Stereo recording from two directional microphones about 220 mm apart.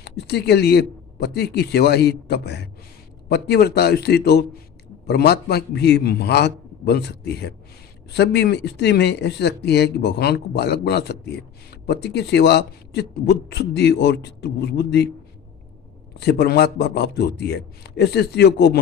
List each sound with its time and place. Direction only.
0.0 s speech: 50° left (ahead or behind)
16.2 s speech: 45° left (ahead or behind)